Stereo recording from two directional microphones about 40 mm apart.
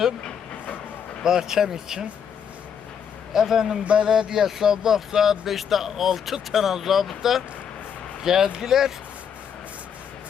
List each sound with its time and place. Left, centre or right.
1.2 s speech: centre
3.3 s speech: centre
3.8 s speech: right; by 8.9 s centre